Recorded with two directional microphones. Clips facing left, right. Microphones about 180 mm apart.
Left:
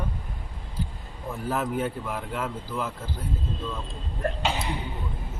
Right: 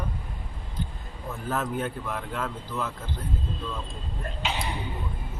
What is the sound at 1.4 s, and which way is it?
Speech, 10° left (ahead or behind).